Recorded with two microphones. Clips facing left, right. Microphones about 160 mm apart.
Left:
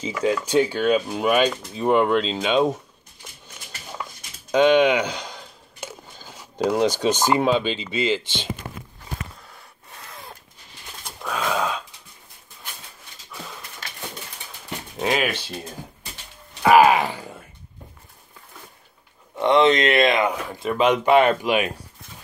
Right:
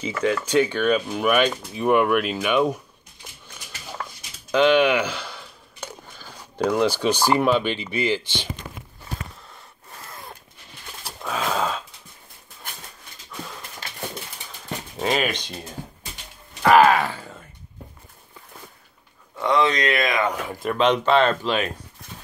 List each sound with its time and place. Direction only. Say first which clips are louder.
0.1 s speech: left 1 dB; 15° left (ahead or behind)
4.5 s speech: left 1 dB; 20° left (ahead or behind)
6.1 s zipper: right 1 dB; 20° left (ahead or behind)
6.9 s speech: even; 20° left (ahead or behind)
10.0 s a sound: even; centre (ahead or behind)
15.0 s speech: even; 5° left (ahead or behind)
16.6 s speech: left 1 dB; 10° left (ahead or behind)
19.3 s speech: left 4 dB; 20° left (ahead or behind)
20.2 s speech: left 1 dB; 5° left (ahead or behind)